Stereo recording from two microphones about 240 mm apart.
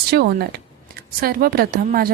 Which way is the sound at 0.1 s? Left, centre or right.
Right.